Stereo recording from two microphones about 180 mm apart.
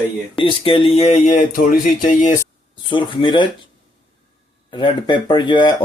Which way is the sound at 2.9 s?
25° left (ahead or behind).